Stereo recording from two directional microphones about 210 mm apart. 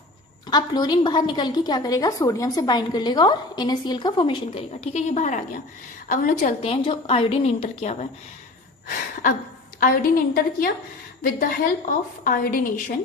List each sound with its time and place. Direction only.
0.5 s a woman's voice: 20° left (ahead or behind); by 6.5 s 40° left (ahead or behind)
6.6 s a woman's voice: 25° left (ahead or behind)
9.8 s a woman's voice: 45° left (ahead or behind)